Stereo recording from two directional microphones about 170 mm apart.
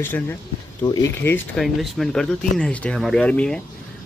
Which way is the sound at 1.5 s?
Centre (ahead or behind).